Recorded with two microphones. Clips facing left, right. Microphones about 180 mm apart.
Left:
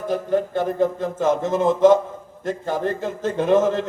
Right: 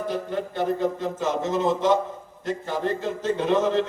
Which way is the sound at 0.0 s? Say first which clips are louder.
Left 6 dB; 45° left (ahead or behind).